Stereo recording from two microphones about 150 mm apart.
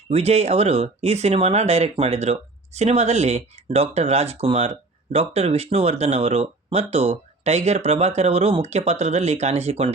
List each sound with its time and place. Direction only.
0.1 s speech: 45° right (ahead or behind)